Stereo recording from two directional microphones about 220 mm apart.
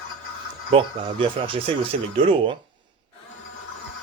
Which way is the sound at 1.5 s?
25° right (ahead or behind).